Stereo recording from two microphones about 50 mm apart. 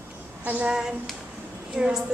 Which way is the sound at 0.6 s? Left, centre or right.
Centre.